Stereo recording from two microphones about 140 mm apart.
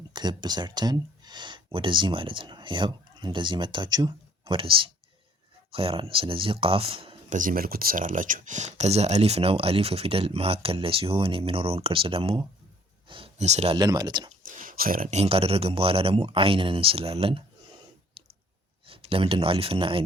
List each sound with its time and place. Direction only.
0.1 s speech: 30° right (ahead or behind)
7.3 s speech: 70° right (ahead or behind); by 12.5 s 40° right (ahead or behind)
13.1 s a sound: 35° right (ahead or behind)
13.4 s speech: 50° right (ahead or behind)
13.7 s speech: 30° right (ahead or behind)
14.4 s a sound: 75° right (ahead or behind)
15.1 s speech: 45° right (ahead or behind)
18.9 s speech: 40° right (ahead or behind)